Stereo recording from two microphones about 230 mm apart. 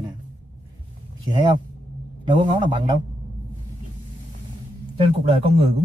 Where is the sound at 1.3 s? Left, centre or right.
Centre.